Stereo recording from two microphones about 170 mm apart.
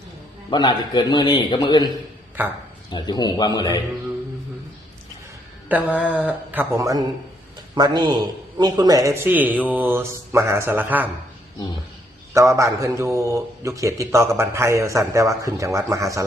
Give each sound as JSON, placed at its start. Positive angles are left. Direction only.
{"t": 0.5, "sound": "a man's voice", "side_deg": 25}
{"t": 2.4, "sound": "a man's voice", "side_deg": -10}
{"t": 2.9, "sound": "a man's voice", "side_deg": 25}
{"t": 5.6, "sound": "a man's voice", "side_deg": -10}
{"t": 12.3, "sound": "a man's voice", "side_deg": -15}